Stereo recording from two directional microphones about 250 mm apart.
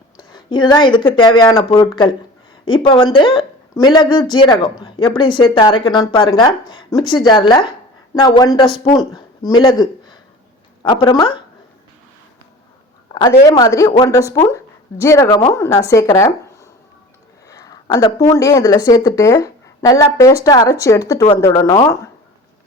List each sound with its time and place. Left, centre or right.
0.2 s a woman's voice: centre
13.4 s speech: centre
17.5 s speech: centre